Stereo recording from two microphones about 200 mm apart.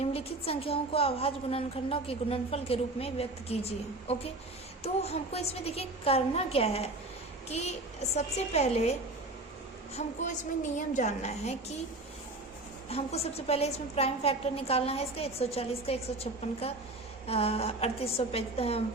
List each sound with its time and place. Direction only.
0.0 s a woman's voice: 30° left (ahead or behind)
12.9 s a woman's voice: 30° left (ahead or behind)